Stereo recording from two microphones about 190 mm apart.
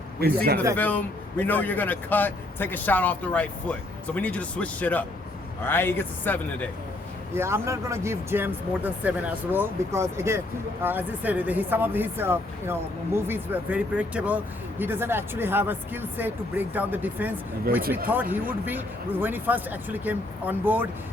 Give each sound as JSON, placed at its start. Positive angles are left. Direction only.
{"t": 0.2, "sound": "a man's voice", "side_deg": -55}
{"t": 0.8, "sound": "speech", "side_deg": 10}
{"t": 7.3, "sound": "speech", "side_deg": -15}